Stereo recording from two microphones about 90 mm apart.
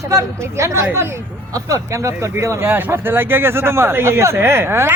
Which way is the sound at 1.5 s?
40° right (ahead or behind).